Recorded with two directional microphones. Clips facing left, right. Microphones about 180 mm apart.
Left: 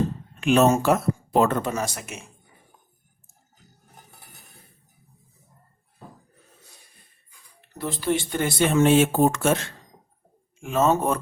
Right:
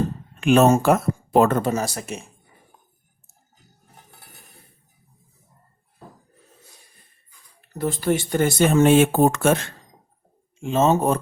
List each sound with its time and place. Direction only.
0.3 s speech: 50° right (ahead or behind); by 2.2 s 35° right (ahead or behind)
7.8 s speech: 45° right (ahead or behind)
10.6 s a man's voice: 25° right (ahead or behind)